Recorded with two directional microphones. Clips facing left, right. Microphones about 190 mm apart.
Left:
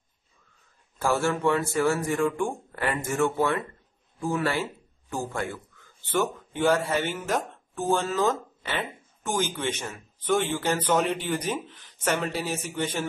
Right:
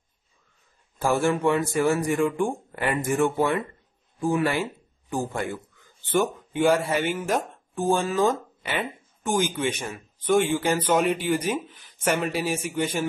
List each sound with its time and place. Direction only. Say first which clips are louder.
1.0 s speech: right 2 dB; 15° right (ahead or behind)